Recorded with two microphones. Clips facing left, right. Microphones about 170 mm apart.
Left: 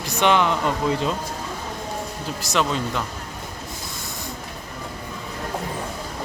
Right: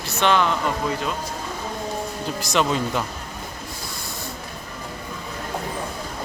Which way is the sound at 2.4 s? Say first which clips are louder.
Right 1 dB; centre (ahead or behind).